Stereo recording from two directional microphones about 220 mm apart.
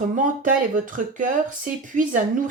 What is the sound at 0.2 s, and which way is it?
Speech, 35° right (ahead or behind).